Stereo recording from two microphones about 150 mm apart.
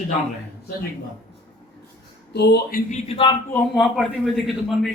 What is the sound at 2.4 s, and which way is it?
Speech, 90° left.